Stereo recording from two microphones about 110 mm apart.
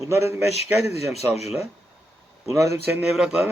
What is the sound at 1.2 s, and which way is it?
Speech, 75° left (ahead or behind).